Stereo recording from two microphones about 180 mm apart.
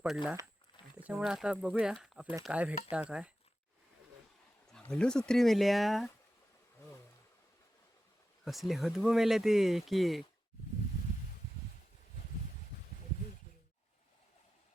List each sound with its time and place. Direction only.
0.9 s speech: 5° right (ahead or behind)
4.7 s speech: 5° left (ahead or behind)
8.4 s speech: centre (ahead or behind)